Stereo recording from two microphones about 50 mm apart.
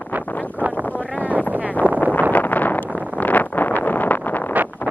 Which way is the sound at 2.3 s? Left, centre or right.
Left.